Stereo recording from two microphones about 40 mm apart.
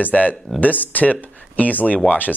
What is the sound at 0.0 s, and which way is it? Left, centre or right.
Speech, left.